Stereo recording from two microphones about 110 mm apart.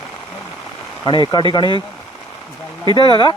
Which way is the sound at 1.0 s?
45° left (ahead or behind).